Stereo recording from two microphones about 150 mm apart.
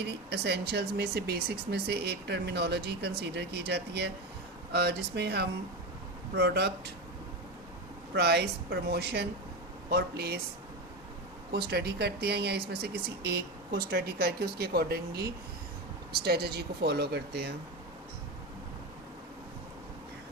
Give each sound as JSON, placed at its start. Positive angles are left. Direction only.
{"t": 0.0, "sound": "speech", "side_deg": -90}
{"t": 8.9, "sound": "speech", "side_deg": -90}
{"t": 11.5, "sound": "speech", "side_deg": -90}